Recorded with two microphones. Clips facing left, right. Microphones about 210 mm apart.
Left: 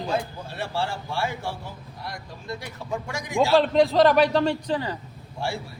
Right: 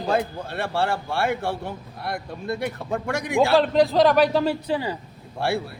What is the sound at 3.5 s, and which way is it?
A man's voice, centre (ahead or behind).